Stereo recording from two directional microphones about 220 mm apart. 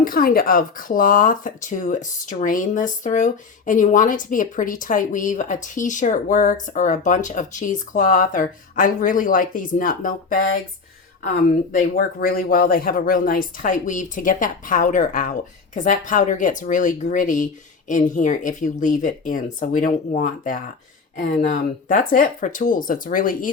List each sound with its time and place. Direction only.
0.0 s speech: 40° left (ahead or behind)
11.7 s speech: 40° left (ahead or behind)